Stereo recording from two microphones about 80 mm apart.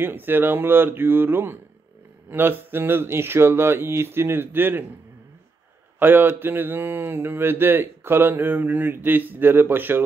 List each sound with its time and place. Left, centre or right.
0.0 s speech: right
5.9 s speech: right